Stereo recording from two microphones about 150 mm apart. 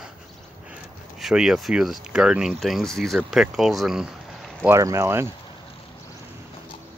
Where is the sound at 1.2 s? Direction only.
5° right (ahead or behind).